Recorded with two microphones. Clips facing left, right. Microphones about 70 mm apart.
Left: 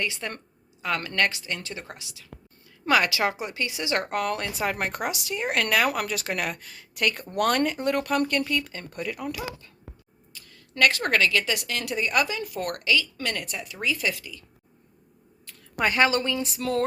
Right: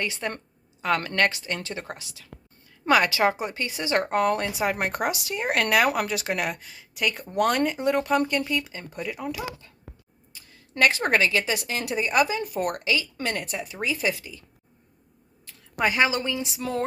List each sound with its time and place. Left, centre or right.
0.0 s a woman's voice: right
4.5 s speech: right
4.9 s speech: right
6.5 s speech: centre
9.2 s speech: right
10.8 s speech: right
15.8 s speech: centre